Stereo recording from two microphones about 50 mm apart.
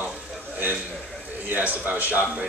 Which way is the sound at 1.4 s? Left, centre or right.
Right.